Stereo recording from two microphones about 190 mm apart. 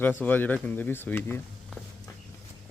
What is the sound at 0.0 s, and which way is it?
Speech, 10° left (ahead or behind).